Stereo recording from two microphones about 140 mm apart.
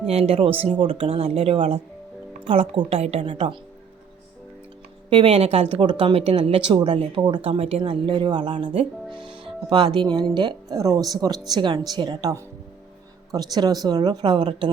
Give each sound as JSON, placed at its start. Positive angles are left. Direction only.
{"t": 0.0, "sound": "speech", "side_deg": -45}
{"t": 5.0, "sound": "speech", "side_deg": -40}
{"t": 5.8, "sound": "speech", "side_deg": -35}
{"t": 7.5, "sound": "speech", "side_deg": -50}